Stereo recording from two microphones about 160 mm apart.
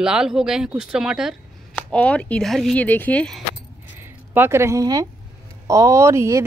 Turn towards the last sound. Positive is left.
turn(degrees=-20)  # may be behind; listen again after turning